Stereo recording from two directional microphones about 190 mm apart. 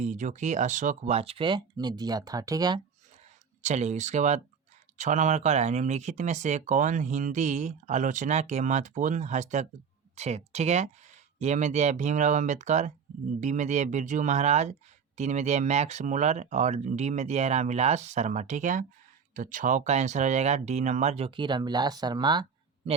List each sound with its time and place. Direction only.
0.0 s speech: 40° right (ahead or behind); by 2.8 s 20° right (ahead or behind)
3.6 s speech: 35° right (ahead or behind)